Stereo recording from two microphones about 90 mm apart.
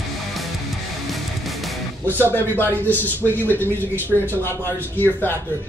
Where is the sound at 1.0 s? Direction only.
Centre (ahead or behind).